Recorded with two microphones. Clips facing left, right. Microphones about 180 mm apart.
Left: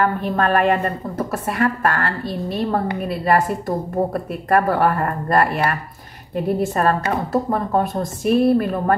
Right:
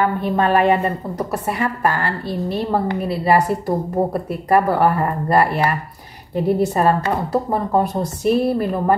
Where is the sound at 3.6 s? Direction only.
20° right (ahead or behind).